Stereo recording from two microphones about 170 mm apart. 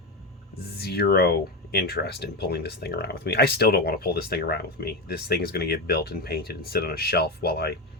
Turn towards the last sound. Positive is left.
turn(degrees=70)  # may be behind; listen again after turning